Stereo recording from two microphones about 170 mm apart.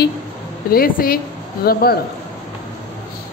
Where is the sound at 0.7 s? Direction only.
60° left (ahead or behind).